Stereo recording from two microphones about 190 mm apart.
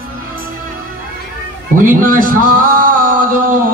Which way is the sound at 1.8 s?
45° right (ahead or behind).